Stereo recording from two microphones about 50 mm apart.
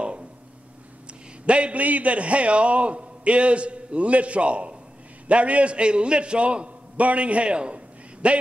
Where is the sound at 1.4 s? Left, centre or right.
Right.